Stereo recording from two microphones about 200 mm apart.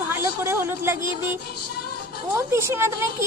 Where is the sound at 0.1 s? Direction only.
10° right (ahead or behind).